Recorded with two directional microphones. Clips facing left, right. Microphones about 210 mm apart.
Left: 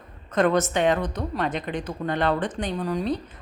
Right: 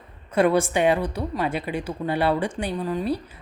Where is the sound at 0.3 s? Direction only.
10° right (ahead or behind).